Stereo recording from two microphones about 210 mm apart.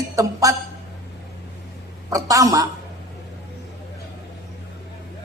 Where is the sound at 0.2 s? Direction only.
15° right (ahead or behind).